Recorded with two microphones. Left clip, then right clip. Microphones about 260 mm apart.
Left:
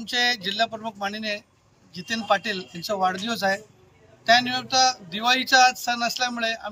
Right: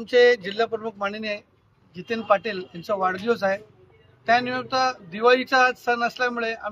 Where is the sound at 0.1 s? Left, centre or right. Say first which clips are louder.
Right 6 dB; centre.